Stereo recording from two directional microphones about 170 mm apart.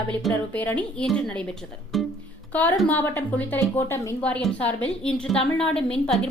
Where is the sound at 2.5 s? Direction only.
10° left (ahead or behind).